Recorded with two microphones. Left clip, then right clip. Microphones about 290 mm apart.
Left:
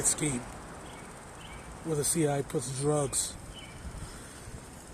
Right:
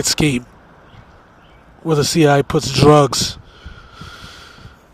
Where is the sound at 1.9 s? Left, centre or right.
Right.